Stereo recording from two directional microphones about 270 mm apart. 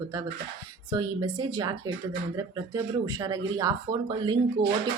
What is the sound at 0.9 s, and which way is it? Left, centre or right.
A woman's voice, centre.